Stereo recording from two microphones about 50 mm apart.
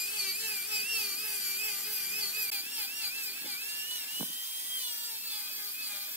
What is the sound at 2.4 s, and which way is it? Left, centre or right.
Dental drill, right.